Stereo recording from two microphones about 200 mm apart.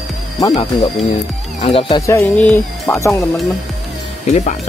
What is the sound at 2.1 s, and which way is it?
Speech, 10° left (ahead or behind).